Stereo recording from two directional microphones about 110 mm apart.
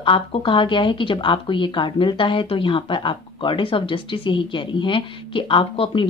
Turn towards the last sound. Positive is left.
turn(degrees=50)  # may be behind; listen again after turning